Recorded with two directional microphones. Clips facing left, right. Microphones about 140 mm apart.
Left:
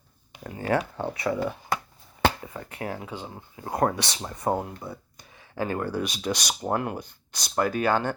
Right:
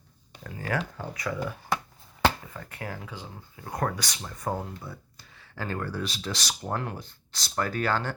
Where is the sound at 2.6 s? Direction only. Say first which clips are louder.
Left 5 dB; 20° left (ahead or behind).